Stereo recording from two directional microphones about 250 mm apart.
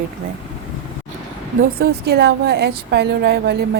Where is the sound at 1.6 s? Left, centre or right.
Right.